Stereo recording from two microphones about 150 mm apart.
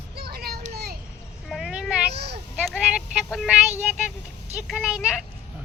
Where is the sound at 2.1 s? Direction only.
90° right.